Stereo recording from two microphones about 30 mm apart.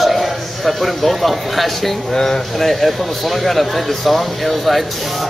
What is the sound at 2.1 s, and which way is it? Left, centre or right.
Speech, left.